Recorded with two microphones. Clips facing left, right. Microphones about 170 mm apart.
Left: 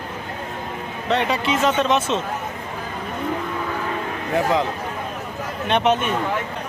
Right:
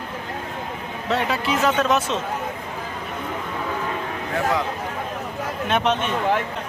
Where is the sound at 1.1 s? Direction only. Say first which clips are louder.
Left 2 dB; centre (ahead or behind).